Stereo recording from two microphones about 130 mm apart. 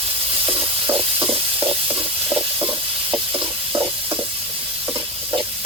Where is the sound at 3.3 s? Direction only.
35° right (ahead or behind).